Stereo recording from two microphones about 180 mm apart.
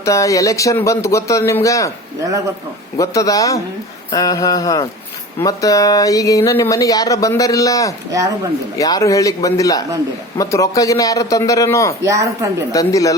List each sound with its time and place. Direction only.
0.0 s a man's voice: 20° left (ahead or behind)
3.0 s speech: 20° left (ahead or behind)
12.0 s speech: 20° right (ahead or behind)
12.7 s speech: 20° left (ahead or behind)